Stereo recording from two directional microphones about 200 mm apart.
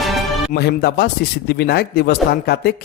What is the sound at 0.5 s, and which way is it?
Speech, 50° left (ahead or behind).